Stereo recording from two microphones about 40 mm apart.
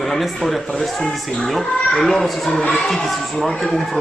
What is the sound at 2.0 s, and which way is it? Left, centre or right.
Speech, centre.